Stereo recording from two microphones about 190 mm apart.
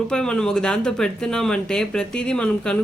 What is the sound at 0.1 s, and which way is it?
Speech, 5° left (ahead or behind).